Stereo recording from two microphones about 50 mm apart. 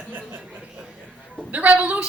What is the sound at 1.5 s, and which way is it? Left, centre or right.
Speech, right.